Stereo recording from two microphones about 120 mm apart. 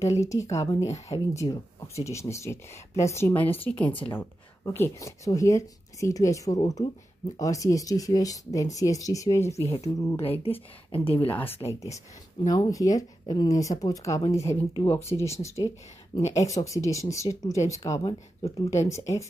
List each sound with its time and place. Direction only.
0.0 s speech: 25° left (ahead or behind)
10.4 s speech: 50° left (ahead or behind)
11.3 s speech: 15° left (ahead or behind)
12.4 s speech: 30° left (ahead or behind)